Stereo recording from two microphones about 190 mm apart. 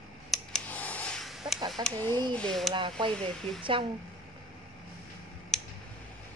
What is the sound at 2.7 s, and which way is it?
Speech, 25° right (ahead or behind).